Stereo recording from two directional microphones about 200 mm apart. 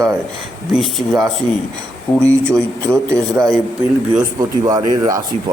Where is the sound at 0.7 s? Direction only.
Centre (ahead or behind).